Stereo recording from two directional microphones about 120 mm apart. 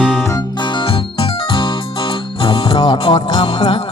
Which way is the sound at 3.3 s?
40° left (ahead or behind).